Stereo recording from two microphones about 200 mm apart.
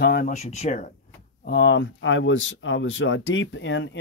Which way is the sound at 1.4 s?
55° left (ahead or behind).